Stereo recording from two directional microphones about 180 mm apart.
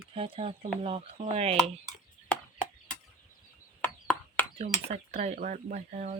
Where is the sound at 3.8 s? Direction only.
10° left (ahead or behind).